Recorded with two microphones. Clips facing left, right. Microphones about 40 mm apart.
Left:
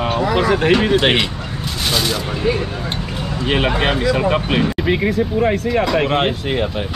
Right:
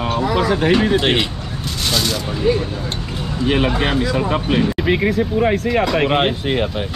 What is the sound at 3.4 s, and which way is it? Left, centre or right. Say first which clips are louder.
Speech: right 1 dB; left.